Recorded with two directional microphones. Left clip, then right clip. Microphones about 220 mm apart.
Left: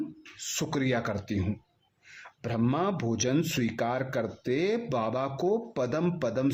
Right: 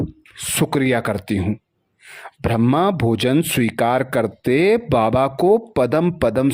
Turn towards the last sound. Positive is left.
turn(degrees=-45)  # may be behind; listen again after turning